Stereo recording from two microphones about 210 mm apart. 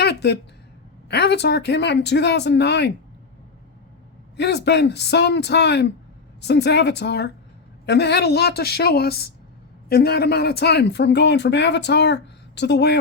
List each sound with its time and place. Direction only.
0.0 s a sound: 50° left (ahead or behind)
1.0 s speech: 50° left (ahead or behind)
4.4 s speech: 55° left (ahead or behind)